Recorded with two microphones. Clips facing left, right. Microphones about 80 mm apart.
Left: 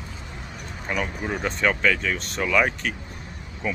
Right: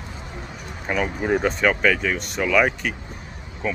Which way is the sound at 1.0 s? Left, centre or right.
Right.